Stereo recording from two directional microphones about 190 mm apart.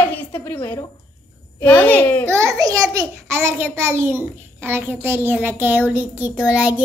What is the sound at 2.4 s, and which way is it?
A child's voice, 15° right (ahead or behind).